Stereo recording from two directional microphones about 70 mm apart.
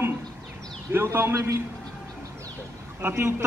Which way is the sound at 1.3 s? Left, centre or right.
Right.